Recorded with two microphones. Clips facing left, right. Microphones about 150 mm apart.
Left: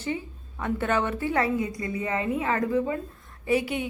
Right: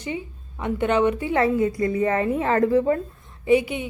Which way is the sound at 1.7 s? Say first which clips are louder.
Right 8 dB; 30° right (ahead or behind).